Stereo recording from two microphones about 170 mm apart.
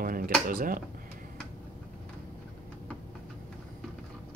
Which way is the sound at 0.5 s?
55° right (ahead or behind).